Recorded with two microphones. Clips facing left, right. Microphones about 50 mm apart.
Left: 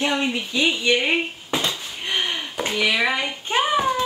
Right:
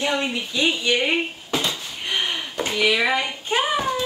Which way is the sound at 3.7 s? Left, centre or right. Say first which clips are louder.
Left 2 dB; centre.